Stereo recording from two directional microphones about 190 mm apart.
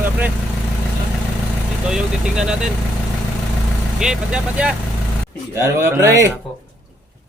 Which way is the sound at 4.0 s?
5° right (ahead or behind).